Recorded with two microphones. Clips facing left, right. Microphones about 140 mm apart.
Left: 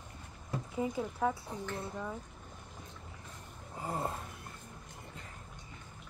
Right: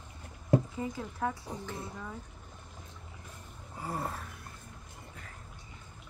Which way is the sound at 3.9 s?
20° left (ahead or behind).